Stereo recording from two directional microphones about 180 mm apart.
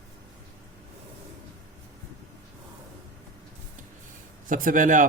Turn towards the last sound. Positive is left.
turn(degrees=-45)  # may be behind; listen again after turning